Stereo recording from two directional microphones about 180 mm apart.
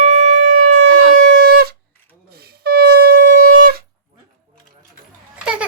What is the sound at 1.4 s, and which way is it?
Shofar, 60° right (ahead or behind).